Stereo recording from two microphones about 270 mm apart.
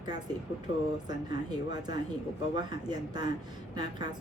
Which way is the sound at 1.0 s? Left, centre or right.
Centre.